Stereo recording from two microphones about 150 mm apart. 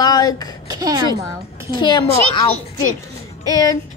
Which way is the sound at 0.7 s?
25° right (ahead or behind).